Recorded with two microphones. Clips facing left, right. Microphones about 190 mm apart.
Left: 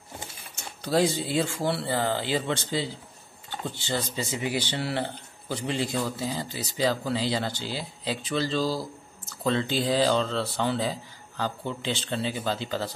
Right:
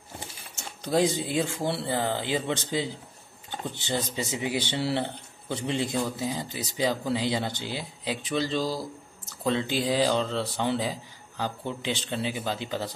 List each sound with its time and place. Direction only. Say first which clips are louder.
0.8 s speech: even; 20° right (ahead or behind)